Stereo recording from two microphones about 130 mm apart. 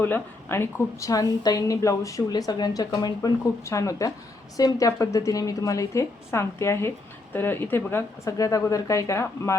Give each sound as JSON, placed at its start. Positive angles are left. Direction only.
{"t": 0.0, "sound": "a woman's voice", "side_deg": 15}